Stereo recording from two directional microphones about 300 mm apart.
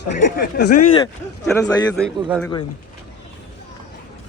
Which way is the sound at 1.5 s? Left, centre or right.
Centre.